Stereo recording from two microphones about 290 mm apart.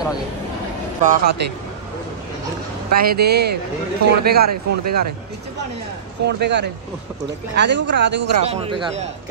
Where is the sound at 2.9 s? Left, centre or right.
Right.